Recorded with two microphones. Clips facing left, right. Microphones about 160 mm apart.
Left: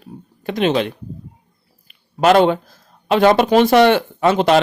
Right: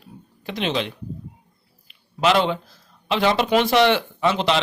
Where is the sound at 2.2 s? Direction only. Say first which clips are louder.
Left 7 dB; 50° left (ahead or behind).